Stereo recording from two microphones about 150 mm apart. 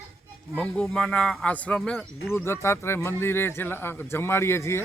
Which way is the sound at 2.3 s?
15° left (ahead or behind).